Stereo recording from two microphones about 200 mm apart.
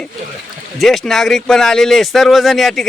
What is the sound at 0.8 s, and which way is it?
Speech, centre (ahead or behind).